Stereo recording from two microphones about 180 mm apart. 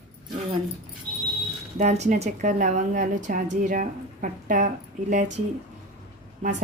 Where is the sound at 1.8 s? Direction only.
40° right (ahead or behind).